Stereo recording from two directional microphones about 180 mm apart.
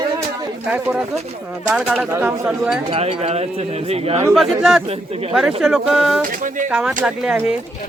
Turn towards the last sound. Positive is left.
turn(degrees=-5)  # may be behind; listen again after turning